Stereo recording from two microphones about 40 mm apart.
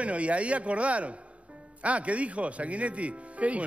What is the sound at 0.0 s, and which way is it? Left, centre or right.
Speech, right.